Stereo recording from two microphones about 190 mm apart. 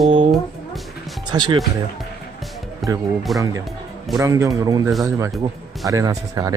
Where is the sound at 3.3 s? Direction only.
20° right (ahead or behind).